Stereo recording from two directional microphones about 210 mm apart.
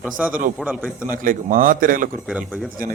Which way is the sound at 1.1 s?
40° right (ahead or behind).